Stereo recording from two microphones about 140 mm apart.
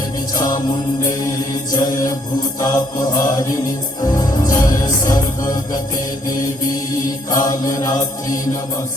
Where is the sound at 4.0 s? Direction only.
25° left (ahead or behind).